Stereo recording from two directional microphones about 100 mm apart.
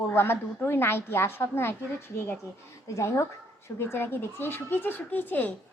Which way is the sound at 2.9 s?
30° left (ahead or behind).